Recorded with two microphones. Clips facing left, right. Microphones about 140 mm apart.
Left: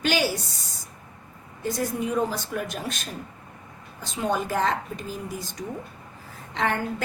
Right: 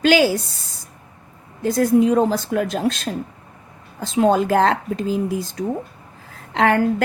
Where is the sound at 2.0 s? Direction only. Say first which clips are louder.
Right 10 dB; 85° right.